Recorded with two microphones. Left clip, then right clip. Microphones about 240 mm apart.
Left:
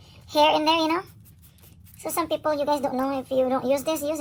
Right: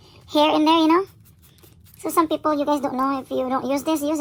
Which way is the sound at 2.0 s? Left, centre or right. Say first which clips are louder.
Right 6 dB; right.